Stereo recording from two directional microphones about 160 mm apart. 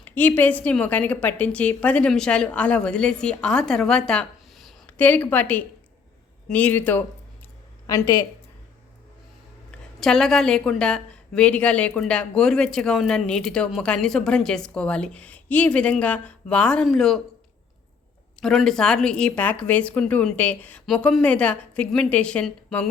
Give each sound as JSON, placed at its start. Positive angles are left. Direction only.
{"t": 0.0, "sound": "a woman's voice", "side_deg": 10}
{"t": 10.0, "sound": "a woman's voice", "side_deg": 5}
{"t": 18.3, "sound": "a woman's voice", "side_deg": 0}